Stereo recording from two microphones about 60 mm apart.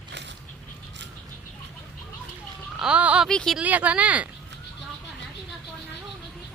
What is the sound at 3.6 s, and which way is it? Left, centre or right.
Speech, right.